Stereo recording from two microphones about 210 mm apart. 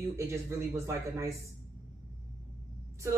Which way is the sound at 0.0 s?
15° right (ahead or behind).